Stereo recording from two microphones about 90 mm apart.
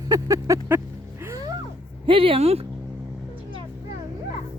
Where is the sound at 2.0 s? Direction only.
85° right.